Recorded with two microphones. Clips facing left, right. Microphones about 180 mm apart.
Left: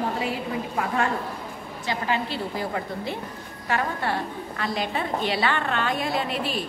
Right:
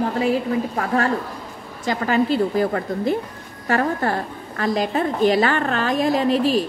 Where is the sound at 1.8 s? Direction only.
45° right (ahead or behind).